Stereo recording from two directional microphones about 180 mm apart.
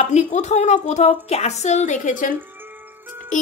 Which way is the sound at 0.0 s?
40° left (ahead or behind).